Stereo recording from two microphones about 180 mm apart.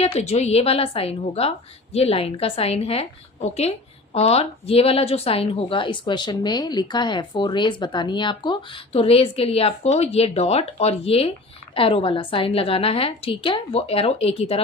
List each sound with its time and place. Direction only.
0.0 s a woman's voice: 35° left (ahead or behind)